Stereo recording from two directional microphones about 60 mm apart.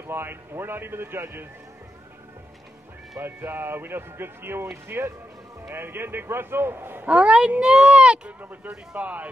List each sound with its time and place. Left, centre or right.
0.0 s speech: right
3.2 s speech: right
7.1 s speech: right
8.4 s speech: right